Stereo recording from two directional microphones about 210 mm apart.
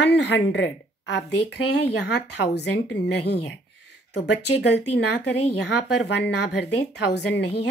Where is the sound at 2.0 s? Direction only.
55° left (ahead or behind).